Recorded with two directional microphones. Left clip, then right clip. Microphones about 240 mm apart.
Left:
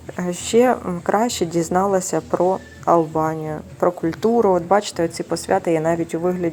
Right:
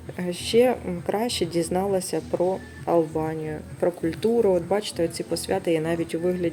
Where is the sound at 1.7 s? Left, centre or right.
Left.